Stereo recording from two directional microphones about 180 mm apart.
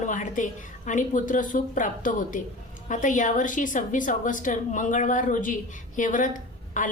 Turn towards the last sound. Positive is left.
turn(degrees=45)  # may be behind; listen again after turning